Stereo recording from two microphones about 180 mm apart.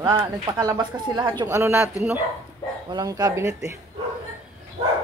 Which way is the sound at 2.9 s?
25° right (ahead or behind).